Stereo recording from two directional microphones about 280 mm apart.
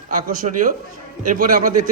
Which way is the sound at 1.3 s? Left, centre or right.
Right.